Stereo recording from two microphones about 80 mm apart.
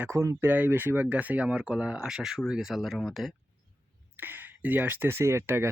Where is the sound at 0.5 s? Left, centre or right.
Right; by 3.3 s centre.